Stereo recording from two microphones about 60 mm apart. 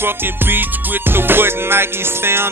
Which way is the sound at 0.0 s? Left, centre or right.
Right.